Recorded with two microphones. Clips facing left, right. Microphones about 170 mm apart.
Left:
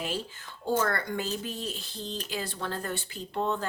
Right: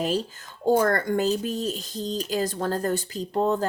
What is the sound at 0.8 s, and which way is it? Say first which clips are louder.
Speech: right 7 dB; 45° right (ahead or behind).